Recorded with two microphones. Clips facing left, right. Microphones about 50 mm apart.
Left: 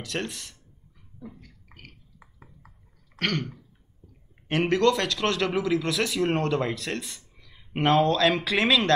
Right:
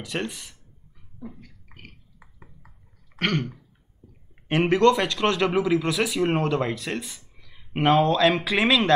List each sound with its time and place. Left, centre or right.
0.0 s speech: centre
1.2 s a sound: centre
3.2 s throat clearing: centre
4.5 s speech: centre